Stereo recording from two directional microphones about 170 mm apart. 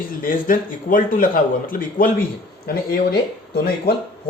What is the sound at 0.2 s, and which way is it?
Speech, 55° left (ahead or behind).